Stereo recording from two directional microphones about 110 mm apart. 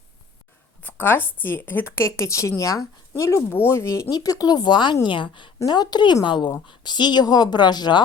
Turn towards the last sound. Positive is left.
turn(degrees=40)  # may be behind; listen again after turning